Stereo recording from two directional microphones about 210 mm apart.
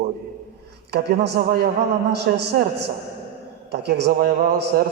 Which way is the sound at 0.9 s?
50° right (ahead or behind).